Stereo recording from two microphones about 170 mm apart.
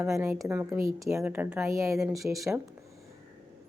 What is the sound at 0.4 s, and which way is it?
A woman's voice, 15° right (ahead or behind).